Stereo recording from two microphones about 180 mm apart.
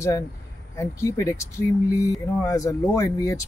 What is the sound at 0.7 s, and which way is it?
Speech, 15° left (ahead or behind).